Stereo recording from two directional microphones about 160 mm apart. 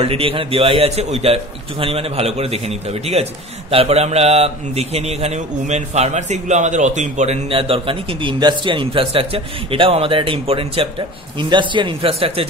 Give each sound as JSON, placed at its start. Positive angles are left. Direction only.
{"t": 0.0, "sound": "a man's voice", "side_deg": -35}